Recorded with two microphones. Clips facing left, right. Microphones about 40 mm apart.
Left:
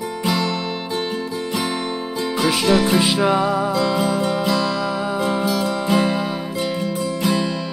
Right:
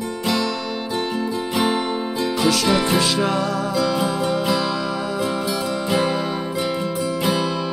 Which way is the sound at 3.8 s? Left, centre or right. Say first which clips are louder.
Left 1 dB; centre.